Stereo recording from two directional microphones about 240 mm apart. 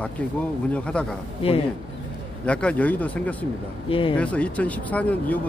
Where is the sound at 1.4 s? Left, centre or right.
Left.